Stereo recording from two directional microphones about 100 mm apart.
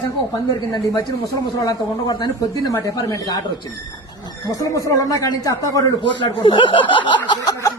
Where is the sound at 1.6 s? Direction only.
40° left (ahead or behind).